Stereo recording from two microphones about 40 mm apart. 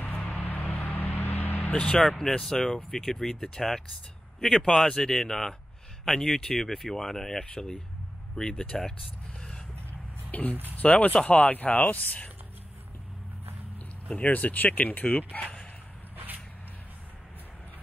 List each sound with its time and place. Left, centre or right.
0.0 s a sound: left
2.0 s speech: centre
10.3 s speech: left
14.0 s speech: left
14.3 s speech: left